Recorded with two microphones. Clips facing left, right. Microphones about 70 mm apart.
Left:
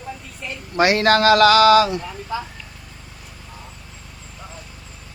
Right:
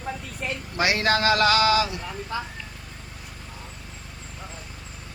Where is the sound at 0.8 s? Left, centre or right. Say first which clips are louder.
Left 7 dB; left.